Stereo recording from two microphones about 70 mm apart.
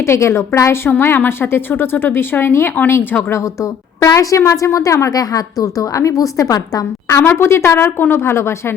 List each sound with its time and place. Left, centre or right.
0.0 s a woman's voice: left
0.9 s a woman's voice: left
3.3 s a woman's voice: left
7.1 s a woman's voice: left